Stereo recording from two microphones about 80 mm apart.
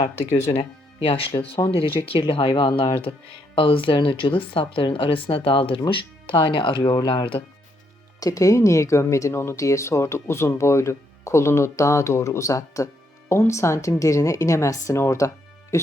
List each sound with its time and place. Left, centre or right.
0.6 s music: left
1.9 s speech: left
3.5 s speech: left
8.2 s speech: left